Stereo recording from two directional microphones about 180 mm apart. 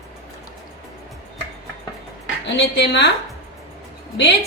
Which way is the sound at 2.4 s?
75° left (ahead or behind).